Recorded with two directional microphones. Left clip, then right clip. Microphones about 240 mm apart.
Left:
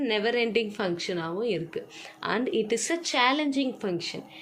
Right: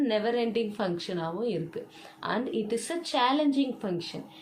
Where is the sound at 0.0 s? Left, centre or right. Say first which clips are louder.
Left 1 dB; left.